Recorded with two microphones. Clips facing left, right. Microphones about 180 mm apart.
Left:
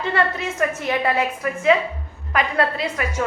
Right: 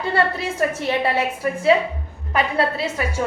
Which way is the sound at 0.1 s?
35° right (ahead or behind).